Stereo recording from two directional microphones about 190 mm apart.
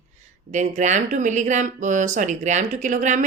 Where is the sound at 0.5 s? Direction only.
40° right (ahead or behind).